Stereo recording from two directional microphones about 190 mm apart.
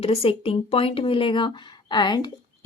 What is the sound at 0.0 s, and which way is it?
Speech, 30° left (ahead or behind).